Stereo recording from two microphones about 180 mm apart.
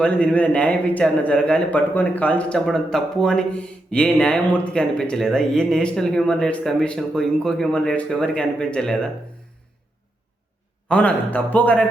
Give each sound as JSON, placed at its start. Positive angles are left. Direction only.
{"t": 0.0, "sound": "speech", "side_deg": 5}
{"t": 10.8, "sound": "a man's voice", "side_deg": 5}